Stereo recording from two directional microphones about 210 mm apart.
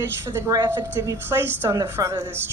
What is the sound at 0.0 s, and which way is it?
A woman's voice, 10° right (ahead or behind).